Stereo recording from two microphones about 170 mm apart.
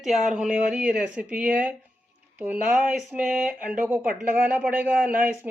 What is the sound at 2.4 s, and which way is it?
Speech, 10° right (ahead or behind).